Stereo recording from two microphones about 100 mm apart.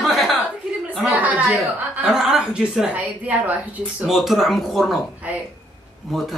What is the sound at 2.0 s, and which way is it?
A woman's voice, 5° right (ahead or behind).